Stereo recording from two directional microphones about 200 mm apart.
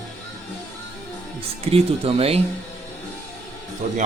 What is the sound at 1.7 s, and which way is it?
Speech, 30° right (ahead or behind).